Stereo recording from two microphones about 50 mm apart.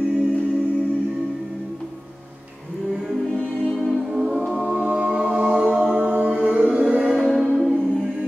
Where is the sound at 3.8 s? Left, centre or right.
Centre.